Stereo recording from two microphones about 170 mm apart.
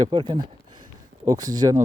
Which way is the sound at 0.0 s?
30° right (ahead or behind).